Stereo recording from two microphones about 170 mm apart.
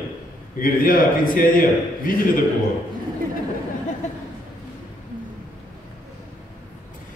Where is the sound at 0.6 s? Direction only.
55° left (ahead or behind).